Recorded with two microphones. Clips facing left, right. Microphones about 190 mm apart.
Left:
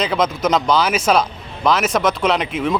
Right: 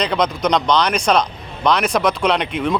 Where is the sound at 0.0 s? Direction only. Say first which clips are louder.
Even; centre (ahead or behind).